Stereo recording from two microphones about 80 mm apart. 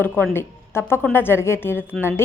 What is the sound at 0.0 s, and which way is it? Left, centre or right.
A woman's voice, left.